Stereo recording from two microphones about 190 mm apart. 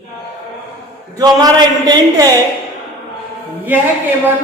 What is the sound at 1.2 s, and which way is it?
A man's voice, 20° right (ahead or behind).